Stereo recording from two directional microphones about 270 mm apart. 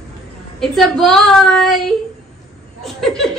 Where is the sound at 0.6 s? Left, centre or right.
Centre.